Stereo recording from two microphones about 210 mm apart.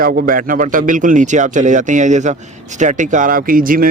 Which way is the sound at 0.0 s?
45° right (ahead or behind).